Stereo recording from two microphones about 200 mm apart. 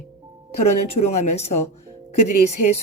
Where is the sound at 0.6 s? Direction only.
35° left (ahead or behind).